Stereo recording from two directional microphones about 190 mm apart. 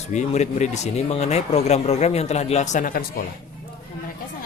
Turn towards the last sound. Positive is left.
turn(degrees=45)  # may be behind; listen again after turning